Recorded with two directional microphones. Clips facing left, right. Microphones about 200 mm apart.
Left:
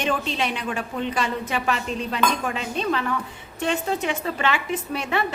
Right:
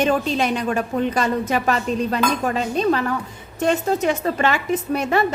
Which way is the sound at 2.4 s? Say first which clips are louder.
Right 6 dB; 40° right (ahead or behind).